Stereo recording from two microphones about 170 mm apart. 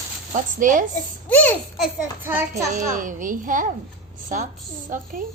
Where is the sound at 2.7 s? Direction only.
50° right (ahead or behind).